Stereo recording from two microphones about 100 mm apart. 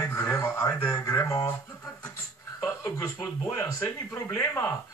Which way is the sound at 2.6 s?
25° left (ahead or behind).